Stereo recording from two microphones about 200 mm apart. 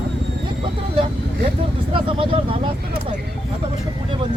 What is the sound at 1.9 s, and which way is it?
Vehicle, 25° right (ahead or behind).